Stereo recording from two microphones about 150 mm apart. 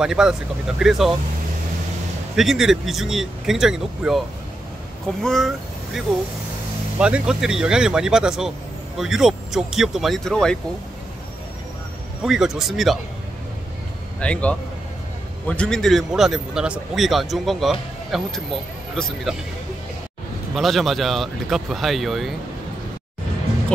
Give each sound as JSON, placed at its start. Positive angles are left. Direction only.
{"t": 0.0, "sound": "a man's voice", "side_deg": -5}
{"t": 2.3, "sound": "a man's voice", "side_deg": -5}
{"t": 5.2, "sound": "a man's voice", "side_deg": 5}
{"t": 7.0, "sound": "a man's voice", "side_deg": -5}
{"t": 12.2, "sound": "a man's voice", "side_deg": -5}
{"t": 14.2, "sound": "a man's voice", "side_deg": 10}
{"t": 20.5, "sound": "a man's voice", "side_deg": 0}